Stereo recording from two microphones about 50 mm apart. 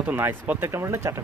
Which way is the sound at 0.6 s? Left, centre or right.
Right.